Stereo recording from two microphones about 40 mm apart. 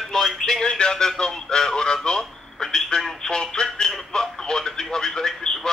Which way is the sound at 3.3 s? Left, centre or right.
Centre.